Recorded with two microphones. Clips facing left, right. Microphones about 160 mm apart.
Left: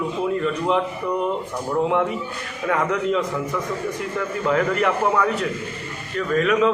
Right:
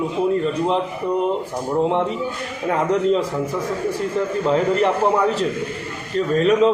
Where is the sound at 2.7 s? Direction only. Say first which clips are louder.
Right 3 dB; 30° right (ahead or behind).